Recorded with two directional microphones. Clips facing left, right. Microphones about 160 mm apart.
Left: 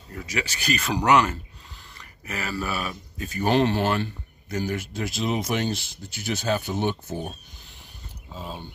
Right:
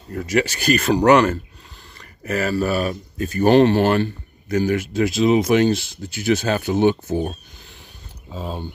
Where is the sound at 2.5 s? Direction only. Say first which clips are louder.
Right 9 dB; 40° right (ahead or behind); by 7.3 s 90° right.